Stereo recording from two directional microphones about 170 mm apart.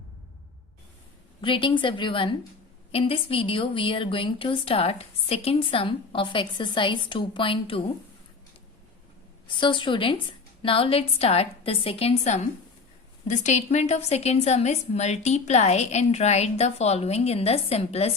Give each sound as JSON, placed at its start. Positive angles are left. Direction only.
{"t": 1.4, "sound": "a woman's voice", "side_deg": 30}
{"t": 9.5, "sound": "a woman's voice", "side_deg": 30}